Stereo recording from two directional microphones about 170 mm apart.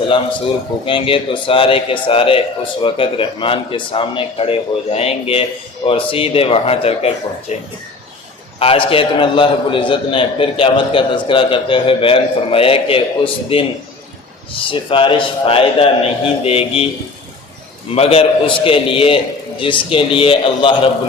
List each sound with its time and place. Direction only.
0.9 s a man's voice: 30° left (ahead or behind)
17.9 s a man's voice: 35° left (ahead or behind)